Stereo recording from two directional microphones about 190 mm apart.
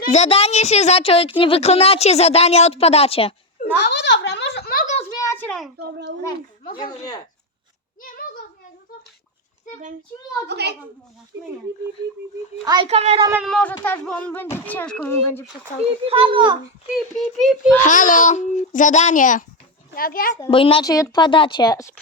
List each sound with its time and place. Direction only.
0.0 s a woman's voice: 35° left (ahead or behind)
3.8 s a sound: 65° left (ahead or behind); by 4.9 s 50° left (ahead or behind)
5.1 s a sound: 15° left (ahead or behind)
6.7 s speech: 20° left (ahead or behind)
10.5 s a child's voice: 60° right (ahead or behind)
12.6 s a woman's voice: 25° right (ahead or behind)
13.4 s a child's voice: 5° left (ahead or behind)
16.0 s a woman's voice: 30° right (ahead or behind)
16.9 s a child's voice: centre (ahead or behind)
17.8 s a child's voice: 45° left (ahead or behind)
20.5 s speech: 25° left (ahead or behind)